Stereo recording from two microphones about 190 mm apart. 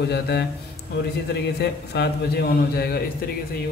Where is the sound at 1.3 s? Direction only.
60° left (ahead or behind).